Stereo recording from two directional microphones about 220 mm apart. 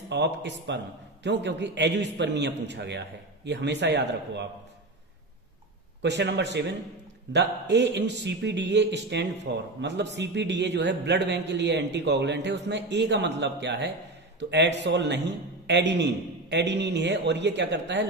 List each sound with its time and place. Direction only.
0.1 s a man's voice: 50° right (ahead or behind)
6.0 s a man's voice: 50° right (ahead or behind)